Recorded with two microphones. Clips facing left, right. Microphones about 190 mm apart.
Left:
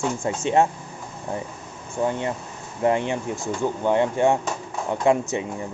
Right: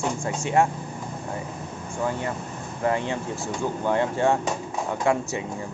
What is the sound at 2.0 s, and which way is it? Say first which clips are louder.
Speech: left 3 dB; 25° left (ahead or behind).